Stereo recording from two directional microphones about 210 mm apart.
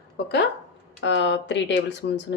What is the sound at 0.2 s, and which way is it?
Speech, 50° left (ahead or behind).